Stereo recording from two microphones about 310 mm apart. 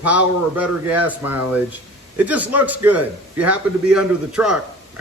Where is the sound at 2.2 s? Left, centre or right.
Centre.